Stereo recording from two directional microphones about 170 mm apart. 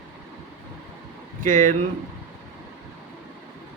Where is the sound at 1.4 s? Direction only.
50° right (ahead or behind).